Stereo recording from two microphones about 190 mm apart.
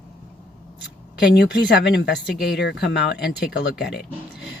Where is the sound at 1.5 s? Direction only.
60° left (ahead or behind).